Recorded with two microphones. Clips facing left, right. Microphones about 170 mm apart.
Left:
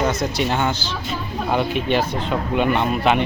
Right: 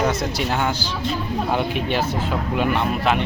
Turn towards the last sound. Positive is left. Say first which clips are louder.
# left 2 dB
turn(degrees=0)  # may be behind; listen again after turning